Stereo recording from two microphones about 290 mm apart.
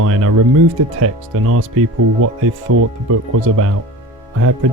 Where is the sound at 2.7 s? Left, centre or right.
Right.